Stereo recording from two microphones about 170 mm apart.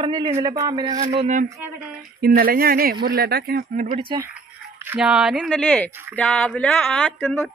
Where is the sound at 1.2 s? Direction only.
45° right (ahead or behind).